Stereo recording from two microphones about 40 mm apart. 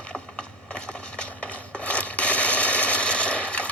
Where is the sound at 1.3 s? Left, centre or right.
Left.